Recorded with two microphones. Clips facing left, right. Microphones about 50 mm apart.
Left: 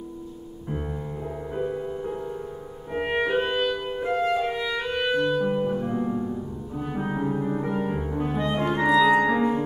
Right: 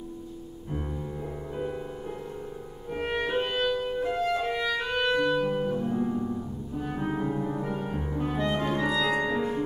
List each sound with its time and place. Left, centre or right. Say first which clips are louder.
1.6 s music: left 6 dB; centre
4.3 s music: left 2 dB; centre
7.1 s music: left 3 dB; centre
8.5 s clarinet: left 11 dB; left
9.1 s music: left 6 dB; left